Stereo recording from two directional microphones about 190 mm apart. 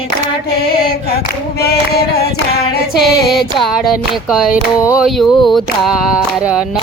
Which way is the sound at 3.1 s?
Centre (ahead or behind).